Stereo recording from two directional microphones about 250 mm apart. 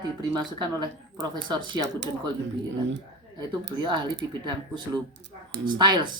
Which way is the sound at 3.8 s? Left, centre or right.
Centre.